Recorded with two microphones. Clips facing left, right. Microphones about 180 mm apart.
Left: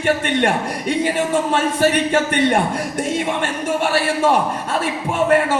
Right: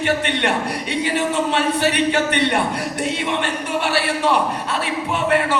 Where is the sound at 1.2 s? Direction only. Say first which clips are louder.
Left 1 dB; 45° left (ahead or behind).